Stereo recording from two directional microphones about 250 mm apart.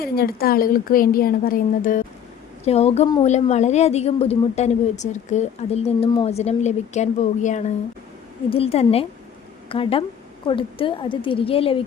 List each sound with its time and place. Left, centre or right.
0.0 s a woman's voice: left